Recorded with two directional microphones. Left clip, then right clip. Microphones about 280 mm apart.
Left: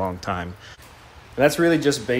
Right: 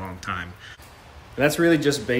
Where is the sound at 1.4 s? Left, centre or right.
Centre.